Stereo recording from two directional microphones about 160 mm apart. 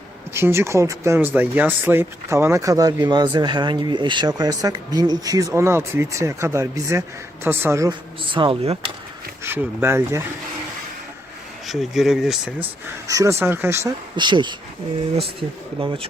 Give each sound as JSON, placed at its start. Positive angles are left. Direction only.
{"t": 0.3, "sound": "speech", "side_deg": -15}
{"t": 7.9, "sound": "speech", "side_deg": -30}
{"t": 9.4, "sound": "speech", "side_deg": -15}
{"t": 11.7, "sound": "speech", "side_deg": 0}
{"t": 13.1, "sound": "speech", "side_deg": -20}
{"t": 14.2, "sound": "speech", "side_deg": -30}
{"t": 15.8, "sound": "speech", "side_deg": -30}